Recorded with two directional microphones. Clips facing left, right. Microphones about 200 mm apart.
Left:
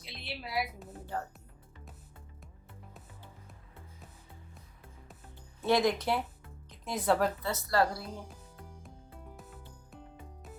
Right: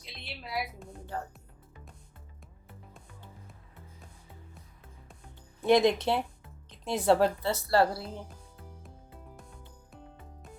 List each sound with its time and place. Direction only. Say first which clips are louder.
0.0 s music: left 2 dB; centre (ahead or behind)
5.6 s a woman's voice: right 4 dB; 20° right (ahead or behind)